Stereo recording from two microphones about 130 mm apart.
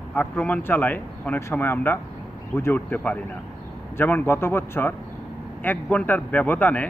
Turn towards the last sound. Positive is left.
turn(degrees=10)  # may be behind; listen again after turning